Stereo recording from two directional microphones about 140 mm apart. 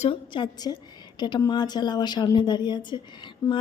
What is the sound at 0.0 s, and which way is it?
A woman's voice, 35° left (ahead or behind).